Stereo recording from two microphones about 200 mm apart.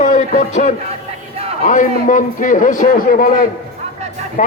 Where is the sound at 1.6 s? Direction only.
40° left (ahead or behind).